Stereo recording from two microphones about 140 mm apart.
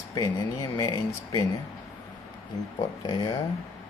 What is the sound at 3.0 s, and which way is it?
Speech, 35° left (ahead or behind).